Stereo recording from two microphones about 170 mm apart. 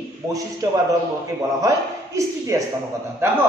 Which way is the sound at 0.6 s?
20° right (ahead or behind).